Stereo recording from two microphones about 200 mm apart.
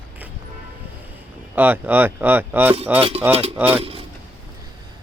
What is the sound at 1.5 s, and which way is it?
Speech, 10° right (ahead or behind).